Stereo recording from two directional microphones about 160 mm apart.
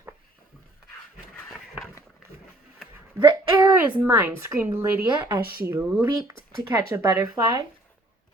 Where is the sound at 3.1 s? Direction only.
25° right (ahead or behind).